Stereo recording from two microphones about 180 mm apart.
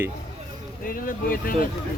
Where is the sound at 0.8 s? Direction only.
50° left (ahead or behind).